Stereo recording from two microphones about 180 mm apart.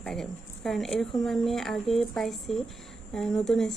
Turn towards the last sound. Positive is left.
turn(degrees=5)  # may be behind; listen again after turning